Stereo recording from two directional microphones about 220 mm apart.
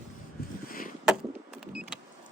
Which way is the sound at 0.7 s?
40° left (ahead or behind).